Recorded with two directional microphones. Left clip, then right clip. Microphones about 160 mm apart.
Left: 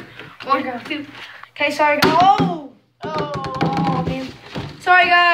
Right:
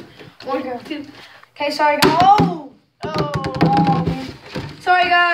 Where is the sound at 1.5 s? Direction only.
5° left (ahead or behind).